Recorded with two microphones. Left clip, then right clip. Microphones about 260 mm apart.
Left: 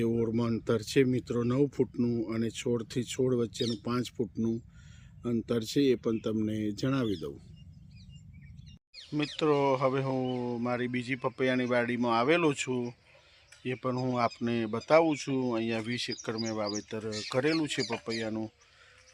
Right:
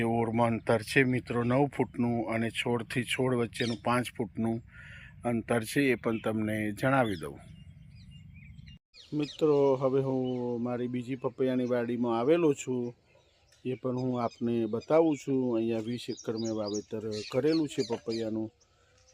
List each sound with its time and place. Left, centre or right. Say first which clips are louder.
0.2 s speech: right 3 dB; centre
5.5 s speech: left 1 dB; centre
9.1 s speech: right 1 dB; centre